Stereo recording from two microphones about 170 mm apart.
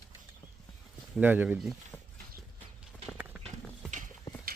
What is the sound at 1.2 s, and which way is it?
Speech, 10° right (ahead or behind).